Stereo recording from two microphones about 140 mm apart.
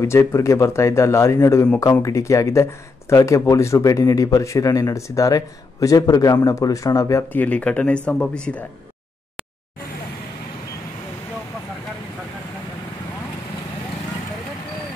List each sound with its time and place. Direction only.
0.0 s speech: 20° left (ahead or behind)
7.3 s speech: 10° left (ahead or behind)